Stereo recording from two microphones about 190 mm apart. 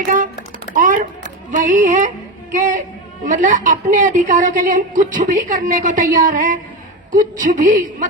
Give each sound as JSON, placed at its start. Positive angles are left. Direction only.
{"t": 0.7, "sound": "typing", "side_deg": -45}
{"t": 1.5, "sound": "music", "side_deg": -45}
{"t": 3.2, "sound": "a woman's voice", "side_deg": -45}